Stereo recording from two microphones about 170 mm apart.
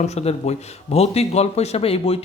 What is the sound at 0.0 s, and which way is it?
Speech, 40° left (ahead or behind).